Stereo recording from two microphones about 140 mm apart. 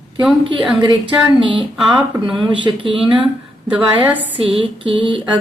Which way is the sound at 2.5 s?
35° right (ahead or behind).